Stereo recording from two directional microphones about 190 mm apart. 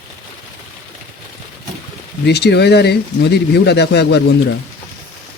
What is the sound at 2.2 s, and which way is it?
Speech, 60° left (ahead or behind).